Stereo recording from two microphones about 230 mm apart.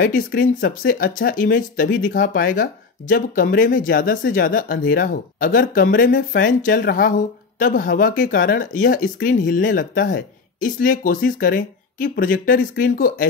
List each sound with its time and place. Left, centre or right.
0.0 s speech: left